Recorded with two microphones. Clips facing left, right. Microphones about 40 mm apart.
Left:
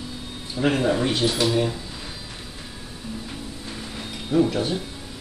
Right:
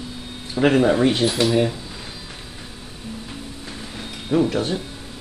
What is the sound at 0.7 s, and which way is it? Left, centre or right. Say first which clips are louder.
Speech: right 5 dB; centre.